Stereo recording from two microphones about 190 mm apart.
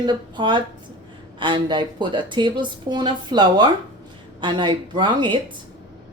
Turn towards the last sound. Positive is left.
turn(degrees=-25)  # may be behind; listen again after turning